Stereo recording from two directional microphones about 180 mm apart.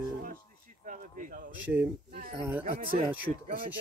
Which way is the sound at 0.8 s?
45° right (ahead or behind).